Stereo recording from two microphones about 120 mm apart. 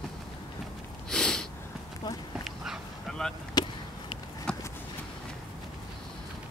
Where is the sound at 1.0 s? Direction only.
5° left (ahead or behind).